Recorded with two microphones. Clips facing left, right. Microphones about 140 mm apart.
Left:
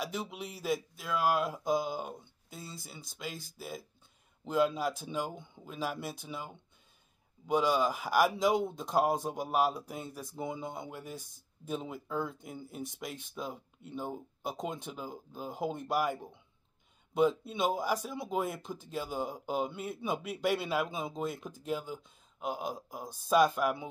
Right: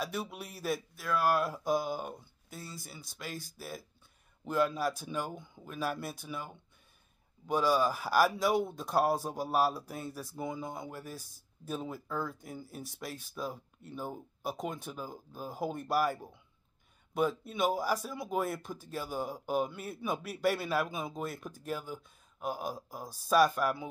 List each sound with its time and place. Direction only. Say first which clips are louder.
0.0 s a man's voice: even; 15° left (ahead or behind)